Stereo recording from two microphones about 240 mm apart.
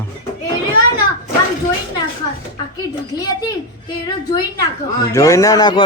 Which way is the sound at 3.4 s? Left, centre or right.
Centre.